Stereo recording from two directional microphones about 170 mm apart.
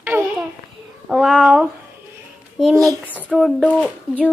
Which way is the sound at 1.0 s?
Centre (ahead or behind).